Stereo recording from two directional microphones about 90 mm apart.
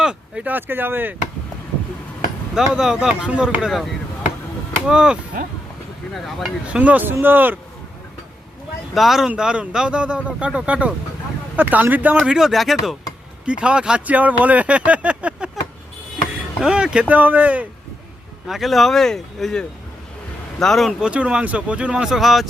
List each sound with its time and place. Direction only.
0.0 s speech: 10° right (ahead or behind)
2.6 s speech: 5° right (ahead or behind)
4.9 s speech: 10° right (ahead or behind)
6.1 s speech: centre (ahead or behind)
6.7 s speech: 15° right (ahead or behind)
9.0 s speech: 5° right (ahead or behind)
13.4 s speech: 10° right (ahead or behind)
16.6 s speech: 10° right (ahead or behind)
18.4 s speech: centre (ahead or behind)
21.0 s speech: 15° right (ahead or behind)